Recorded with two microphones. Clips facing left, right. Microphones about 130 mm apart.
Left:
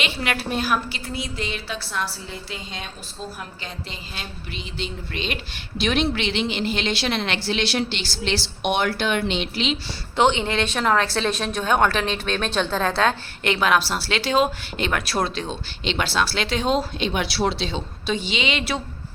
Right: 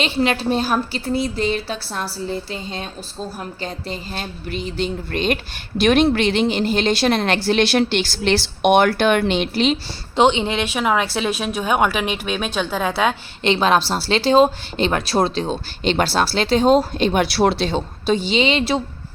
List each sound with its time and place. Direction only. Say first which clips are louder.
0.0 s a woman's voice: right 7 dB; 30° right (ahead or behind); by 9.7 s 45° right (ahead or behind)
10.2 s speech: right 3 dB; 20° right (ahead or behind)
13.4 s a woman's voice: right 4 dB; 25° right (ahead or behind)